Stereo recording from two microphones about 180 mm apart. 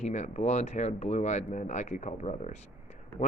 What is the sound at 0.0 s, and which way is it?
Speech, 40° left (ahead or behind).